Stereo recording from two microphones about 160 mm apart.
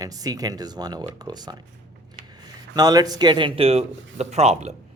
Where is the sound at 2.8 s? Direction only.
25° right (ahead or behind); by 4.7 s 45° right (ahead or behind).